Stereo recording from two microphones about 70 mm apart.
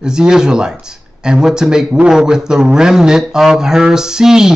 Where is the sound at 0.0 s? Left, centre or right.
Centre.